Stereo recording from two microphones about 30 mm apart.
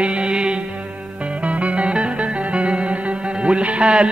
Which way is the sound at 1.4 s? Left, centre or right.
Right.